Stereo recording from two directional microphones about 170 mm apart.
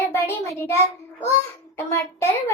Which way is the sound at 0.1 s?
15° left (ahead or behind).